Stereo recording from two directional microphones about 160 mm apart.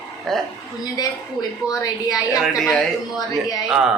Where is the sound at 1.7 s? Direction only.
20° left (ahead or behind).